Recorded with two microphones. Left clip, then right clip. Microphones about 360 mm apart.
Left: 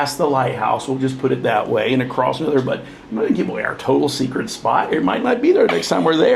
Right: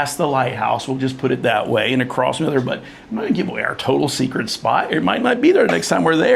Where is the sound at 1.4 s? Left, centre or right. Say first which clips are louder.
Right 1 dB; right.